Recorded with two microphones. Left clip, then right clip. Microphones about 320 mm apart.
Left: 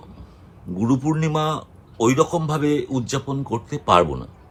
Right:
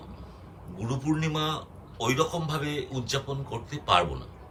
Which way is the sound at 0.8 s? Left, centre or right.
Centre.